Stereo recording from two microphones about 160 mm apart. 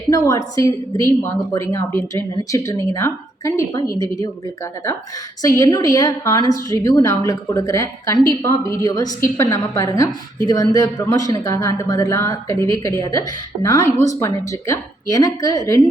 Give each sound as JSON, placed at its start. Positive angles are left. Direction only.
{"t": 0.1, "sound": "speech", "side_deg": 20}
{"t": 5.4, "sound": "speech", "side_deg": 20}